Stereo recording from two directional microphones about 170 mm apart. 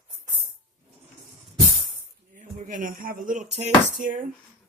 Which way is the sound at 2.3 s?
50° right (ahead or behind).